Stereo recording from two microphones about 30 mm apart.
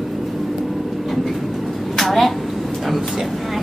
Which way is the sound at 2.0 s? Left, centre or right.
Centre.